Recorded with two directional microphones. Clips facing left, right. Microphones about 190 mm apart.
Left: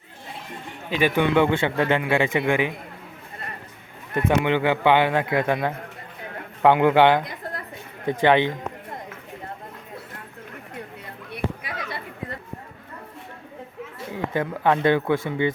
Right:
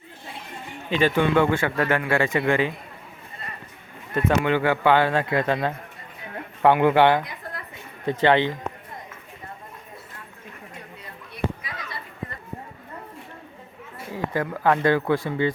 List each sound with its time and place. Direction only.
0.9 s a man's voice: 10° left (ahead or behind)
4.1 s a man's voice: 15° left (ahead or behind)
11.3 s a sound: 65° left (ahead or behind)
14.1 s speech: 20° left (ahead or behind)